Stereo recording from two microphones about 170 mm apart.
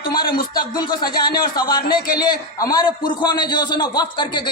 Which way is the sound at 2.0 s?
60° left (ahead or behind).